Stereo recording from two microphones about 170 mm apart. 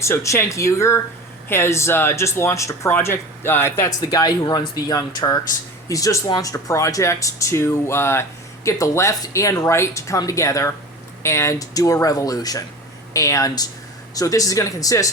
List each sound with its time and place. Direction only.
0.0 s speech: 15° left (ahead or behind)